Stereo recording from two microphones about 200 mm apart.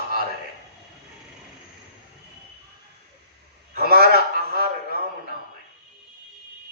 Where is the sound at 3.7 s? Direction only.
50° right (ahead or behind).